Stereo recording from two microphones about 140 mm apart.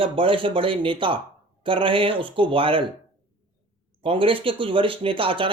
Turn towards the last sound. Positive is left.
turn(degrees=-40)  # may be behind; listen again after turning